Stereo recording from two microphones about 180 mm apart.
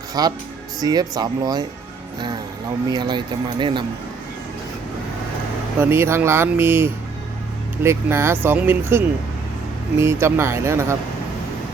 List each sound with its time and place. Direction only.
0.1 s speech: 20° right (ahead or behind)
2.9 s speech: 25° right (ahead or behind)
5.8 s speech: 15° right (ahead or behind)